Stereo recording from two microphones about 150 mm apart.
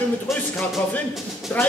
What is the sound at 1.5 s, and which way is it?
Speech, 10° left (ahead or behind).